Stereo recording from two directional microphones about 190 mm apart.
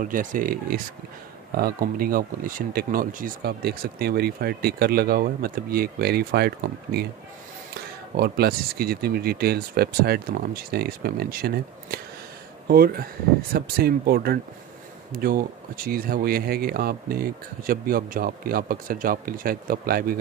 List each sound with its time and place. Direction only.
0.0 s speech: 45° right (ahead or behind)
8.2 s speech: 55° right (ahead or behind)